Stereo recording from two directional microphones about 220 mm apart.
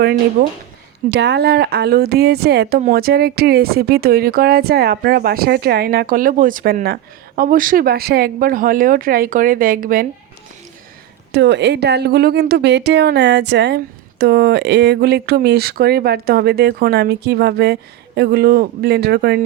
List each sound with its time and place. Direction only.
0.4 s speech: 45° right (ahead or behind)
11.3 s speech: 50° right (ahead or behind)